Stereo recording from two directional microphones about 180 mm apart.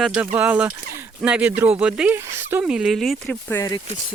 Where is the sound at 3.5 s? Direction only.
20° left (ahead or behind).